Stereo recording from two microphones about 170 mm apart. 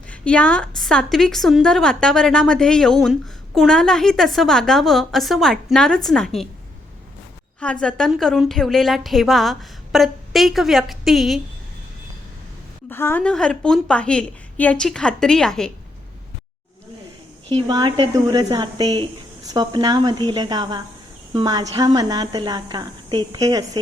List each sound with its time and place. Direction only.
0.1 s a woman's voice: 5° left (ahead or behind)
7.6 s a woman's voice: 5° left (ahead or behind)
12.9 s a woman's voice: 15° left (ahead or behind)
17.5 s a woman's voice: 25° right (ahead or behind)
18.1 s a woman's voice: 20° right (ahead or behind)